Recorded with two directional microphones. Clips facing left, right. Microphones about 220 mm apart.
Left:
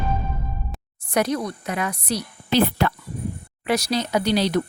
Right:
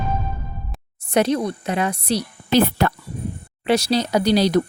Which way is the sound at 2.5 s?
45° right (ahead or behind).